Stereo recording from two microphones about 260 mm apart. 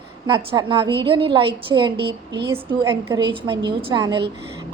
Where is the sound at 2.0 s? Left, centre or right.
Right.